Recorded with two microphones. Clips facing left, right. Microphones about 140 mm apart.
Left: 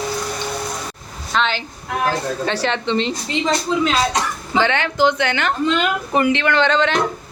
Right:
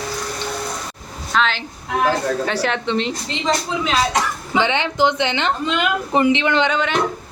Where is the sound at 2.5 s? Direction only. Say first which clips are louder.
Even; 5° right (ahead or behind).